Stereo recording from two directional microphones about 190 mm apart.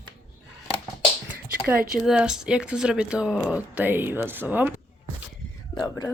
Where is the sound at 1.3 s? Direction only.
10° right (ahead or behind).